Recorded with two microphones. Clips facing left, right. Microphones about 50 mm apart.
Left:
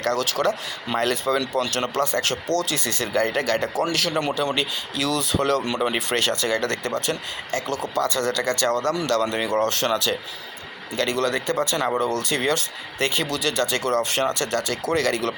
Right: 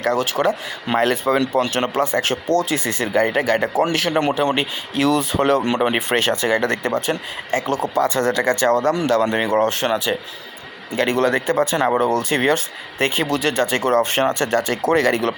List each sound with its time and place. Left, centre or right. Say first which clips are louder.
0.2 s speech: right 3 dB; right
3.8 s speech: right 5 dB; right